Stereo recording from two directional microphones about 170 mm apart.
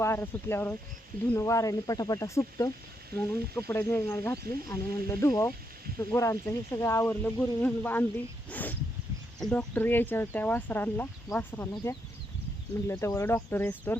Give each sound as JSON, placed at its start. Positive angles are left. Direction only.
{"t": 0.0, "sound": "speech", "side_deg": 15}